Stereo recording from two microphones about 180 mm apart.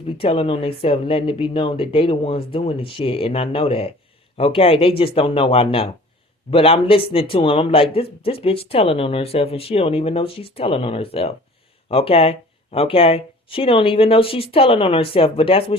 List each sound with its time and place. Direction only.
0.1 s speech: 30° left (ahead or behind)